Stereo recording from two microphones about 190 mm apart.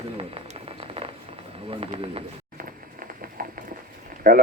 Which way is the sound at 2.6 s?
50° right (ahead or behind).